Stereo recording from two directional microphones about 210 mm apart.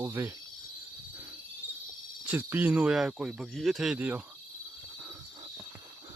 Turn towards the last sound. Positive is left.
turn(degrees=-5)  # may be behind; listen again after turning